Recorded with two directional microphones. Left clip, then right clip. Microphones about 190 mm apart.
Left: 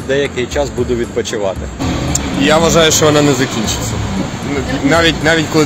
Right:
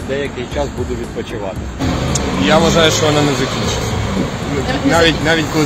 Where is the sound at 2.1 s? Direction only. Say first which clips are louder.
Left 1 dB; 55° left (ahead or behind).